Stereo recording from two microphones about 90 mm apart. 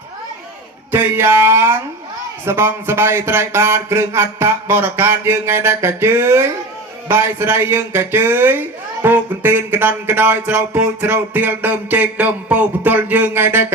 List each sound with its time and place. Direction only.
0.9 s speech: 20° right (ahead or behind)